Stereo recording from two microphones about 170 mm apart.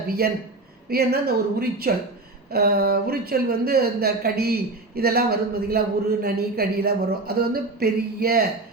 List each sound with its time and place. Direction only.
0.2 s speech: 65° right (ahead or behind)